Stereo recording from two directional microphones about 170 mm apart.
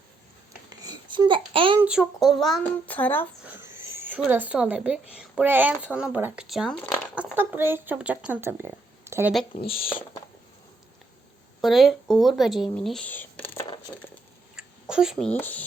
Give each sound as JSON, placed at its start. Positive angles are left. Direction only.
{"t": 0.7, "sound": "babbling", "side_deg": -25}
{"t": 1.8, "sound": "speech", "side_deg": -5}
{"t": 3.4, "sound": "speech", "side_deg": -15}
{"t": 9.6, "sound": "speech", "side_deg": 35}
{"t": 11.6, "sound": "speech", "side_deg": 0}
{"t": 14.5, "sound": "speech", "side_deg": -5}